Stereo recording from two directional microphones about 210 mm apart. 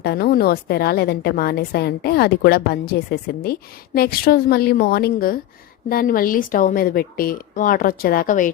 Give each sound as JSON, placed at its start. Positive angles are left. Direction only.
{"t": 0.0, "sound": "a woman's voice", "side_deg": 45}